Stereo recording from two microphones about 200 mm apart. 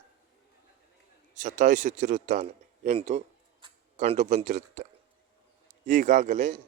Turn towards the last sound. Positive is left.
turn(degrees=-35)  # may be behind; listen again after turning